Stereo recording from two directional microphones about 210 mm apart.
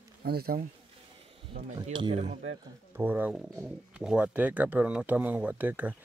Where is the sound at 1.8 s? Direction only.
25° right (ahead or behind).